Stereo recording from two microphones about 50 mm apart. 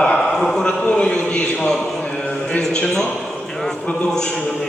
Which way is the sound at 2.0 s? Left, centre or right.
Centre.